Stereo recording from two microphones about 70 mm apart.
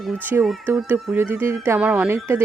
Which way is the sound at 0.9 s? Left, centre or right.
Right.